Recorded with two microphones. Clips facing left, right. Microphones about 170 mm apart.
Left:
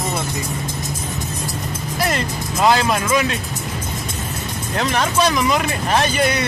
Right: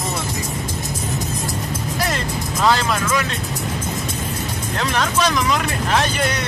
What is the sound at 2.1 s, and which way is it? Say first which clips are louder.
Speech: left 1 dB; 15° left (ahead or behind).